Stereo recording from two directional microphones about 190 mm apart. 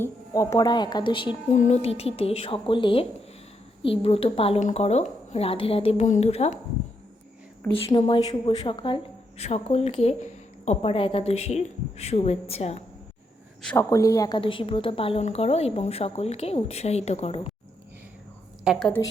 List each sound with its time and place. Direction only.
0.0 s speech: 15° left (ahead or behind)
1.5 s a woman's voice: 35° left (ahead or behind)
7.7 s a woman's voice: 25° left (ahead or behind)
13.7 s a woman's voice: 15° left (ahead or behind)
18.6 s a woman's voice: centre (ahead or behind)